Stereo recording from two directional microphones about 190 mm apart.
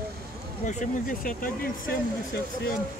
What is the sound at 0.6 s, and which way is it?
Speech, 45° left (ahead or behind).